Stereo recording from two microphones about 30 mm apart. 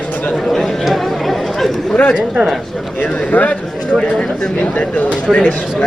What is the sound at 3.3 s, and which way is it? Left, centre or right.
Speech, left.